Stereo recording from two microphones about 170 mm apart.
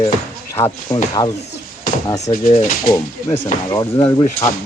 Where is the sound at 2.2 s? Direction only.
40° left (ahead or behind).